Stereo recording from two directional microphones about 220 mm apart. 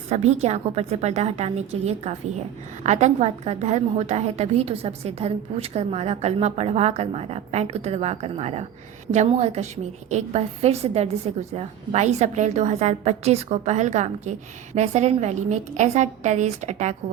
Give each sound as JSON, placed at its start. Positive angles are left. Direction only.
{"t": 0.1, "sound": "a woman's voice", "side_deg": -30}